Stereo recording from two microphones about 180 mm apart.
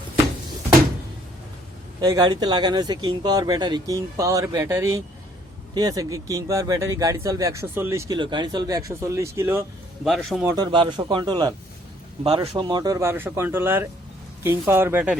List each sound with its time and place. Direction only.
2.0 s speech: 20° right (ahead or behind)
10.0 s a man's voice: centre (ahead or behind)
10.4 s speech: 20° right (ahead or behind)